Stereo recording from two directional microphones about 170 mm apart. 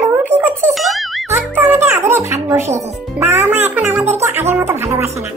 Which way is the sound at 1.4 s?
10° right (ahead or behind).